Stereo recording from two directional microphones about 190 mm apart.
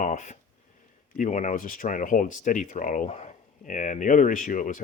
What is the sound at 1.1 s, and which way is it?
Speech, 40° left (ahead or behind).